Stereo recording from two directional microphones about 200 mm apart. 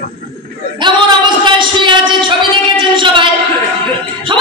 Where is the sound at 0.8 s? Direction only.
25° right (ahead or behind).